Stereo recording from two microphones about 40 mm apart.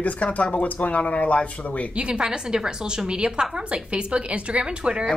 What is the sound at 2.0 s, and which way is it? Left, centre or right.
A woman's voice, right.